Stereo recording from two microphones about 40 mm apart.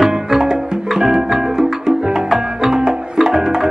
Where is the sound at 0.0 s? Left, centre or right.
Centre.